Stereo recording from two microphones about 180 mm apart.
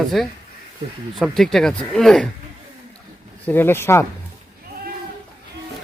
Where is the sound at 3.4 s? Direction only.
10° left (ahead or behind).